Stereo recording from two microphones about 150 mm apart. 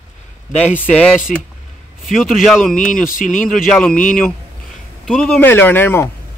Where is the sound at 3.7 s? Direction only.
5° left (ahead or behind).